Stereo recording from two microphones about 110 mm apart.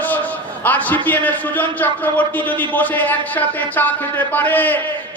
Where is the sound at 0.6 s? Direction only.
15° left (ahead or behind).